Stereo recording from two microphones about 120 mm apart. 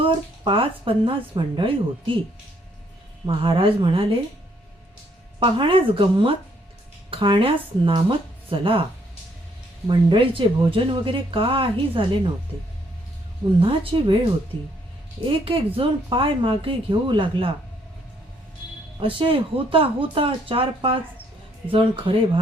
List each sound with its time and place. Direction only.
0.0 s speech: 45° right (ahead or behind)
3.2 s speech: 50° right (ahead or behind)
5.4 s speech: 45° right (ahead or behind)
9.8 s speech: 40° right (ahead or behind)
13.6 s speech: 45° right (ahead or behind)
15.3 s speech: 50° right (ahead or behind)
18.9 s speech: 45° right (ahead or behind)